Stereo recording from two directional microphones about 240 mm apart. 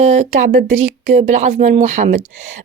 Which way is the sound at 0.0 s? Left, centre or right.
Right.